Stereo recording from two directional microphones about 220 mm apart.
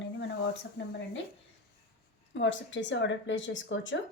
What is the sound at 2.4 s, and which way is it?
A woman's voice, 55° left (ahead or behind).